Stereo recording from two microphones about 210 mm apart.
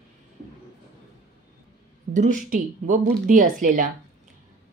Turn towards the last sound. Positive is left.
turn(degrees=-40)  # may be behind; listen again after turning